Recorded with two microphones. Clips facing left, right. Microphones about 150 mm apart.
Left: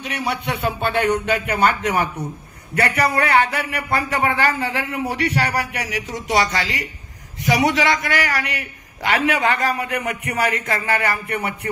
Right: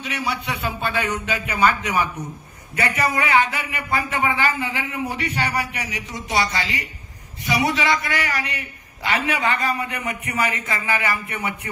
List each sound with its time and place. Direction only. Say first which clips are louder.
0.0 s a man's voice: left 2 dB; 60° left (ahead or behind)